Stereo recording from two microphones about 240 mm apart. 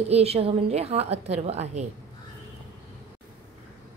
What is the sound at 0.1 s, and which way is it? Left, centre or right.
A woman's voice, right.